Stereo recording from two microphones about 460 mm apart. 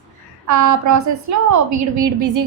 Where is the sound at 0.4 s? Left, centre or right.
Right.